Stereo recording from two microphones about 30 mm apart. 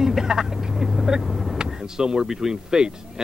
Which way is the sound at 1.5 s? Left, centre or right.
Right.